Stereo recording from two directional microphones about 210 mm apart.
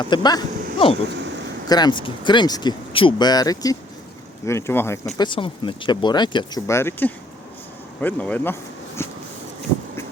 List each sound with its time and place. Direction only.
0.0 s speech: 20° left (ahead or behind)
5.1 s speech: 20° left (ahead or behind)
9.0 s a sound: 10° left (ahead or behind)